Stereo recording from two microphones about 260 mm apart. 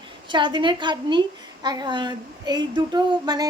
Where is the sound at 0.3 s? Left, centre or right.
Centre.